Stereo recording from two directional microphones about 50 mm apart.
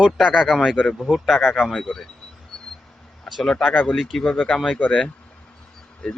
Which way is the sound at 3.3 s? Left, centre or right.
Centre.